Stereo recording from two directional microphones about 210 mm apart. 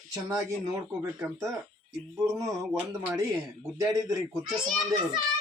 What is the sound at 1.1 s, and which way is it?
Speech, 10° right (ahead or behind).